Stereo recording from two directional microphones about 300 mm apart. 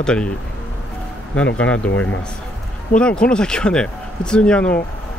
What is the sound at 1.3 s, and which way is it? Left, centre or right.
Speech, centre.